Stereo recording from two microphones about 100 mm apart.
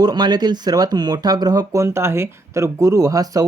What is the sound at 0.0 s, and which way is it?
Speech, 45° right (ahead or behind).